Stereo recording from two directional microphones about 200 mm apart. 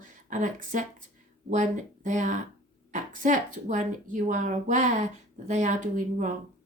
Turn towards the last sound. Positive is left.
turn(degrees=-40)  # may be behind; listen again after turning